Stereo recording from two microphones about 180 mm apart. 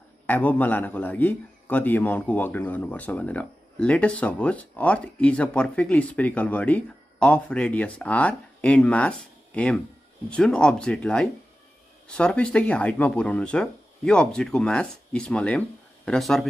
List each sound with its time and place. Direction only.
0.3 s a man's voice: 10° left (ahead or behind)